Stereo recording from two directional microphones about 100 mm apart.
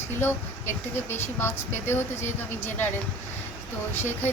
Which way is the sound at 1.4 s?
25° left (ahead or behind).